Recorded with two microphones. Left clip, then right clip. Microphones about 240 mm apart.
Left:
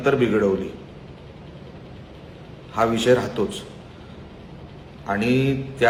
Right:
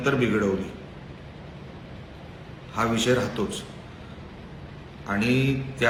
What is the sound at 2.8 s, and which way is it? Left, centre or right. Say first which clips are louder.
Mantra: left 5 dB; centre.